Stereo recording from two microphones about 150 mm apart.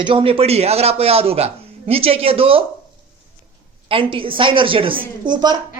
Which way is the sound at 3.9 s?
35° right (ahead or behind).